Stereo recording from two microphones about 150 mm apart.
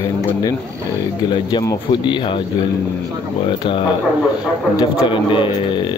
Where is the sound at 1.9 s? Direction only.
30° left (ahead or behind).